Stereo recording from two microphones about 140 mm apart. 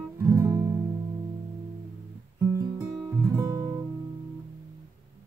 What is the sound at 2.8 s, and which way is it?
Music, 15° right (ahead or behind).